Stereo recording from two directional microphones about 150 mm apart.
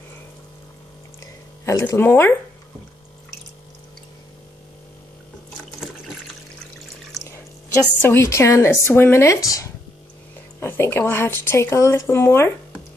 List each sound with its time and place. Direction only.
1.7 s speech: 20° left (ahead or behind)
7.2 s a woman's voice: 15° left (ahead or behind)